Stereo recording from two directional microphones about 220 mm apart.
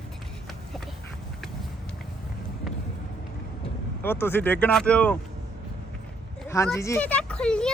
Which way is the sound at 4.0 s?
10° left (ahead or behind).